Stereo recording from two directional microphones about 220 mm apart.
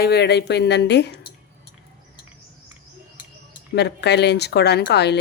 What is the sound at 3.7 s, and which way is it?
A woman's voice, 50° left (ahead or behind).